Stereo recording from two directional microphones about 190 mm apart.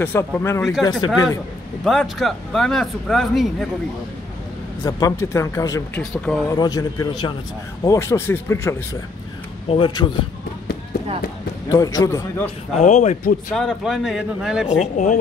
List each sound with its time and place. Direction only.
0.0 s speech: 10° left (ahead or behind)
0.6 s speech: centre (ahead or behind)
1.0 s speech: 15° left (ahead or behind)
1.9 s speech: centre (ahead or behind)
4.8 s speech: 15° left (ahead or behind)
6.5 s a man's voice: 20° left (ahead or behind)
9.7 s a man's voice: 25° left (ahead or behind)
11.7 s speech: 20° left (ahead or behind)
12.7 s speech: 40° left (ahead or behind)
13.6 s speech: centre (ahead or behind)
14.7 s speech: 40° left (ahead or behind)